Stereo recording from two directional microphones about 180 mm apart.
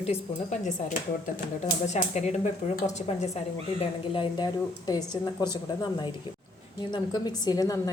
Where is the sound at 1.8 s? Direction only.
40° left (ahead or behind).